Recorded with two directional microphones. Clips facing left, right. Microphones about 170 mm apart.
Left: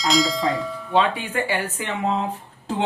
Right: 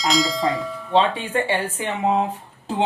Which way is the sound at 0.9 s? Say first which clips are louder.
Right 2 dB; 30° right (ahead or behind).